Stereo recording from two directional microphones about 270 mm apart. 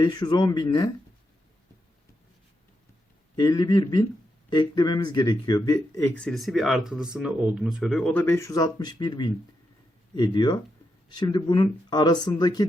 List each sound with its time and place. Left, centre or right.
0.0 s speech: centre
3.3 s speech: centre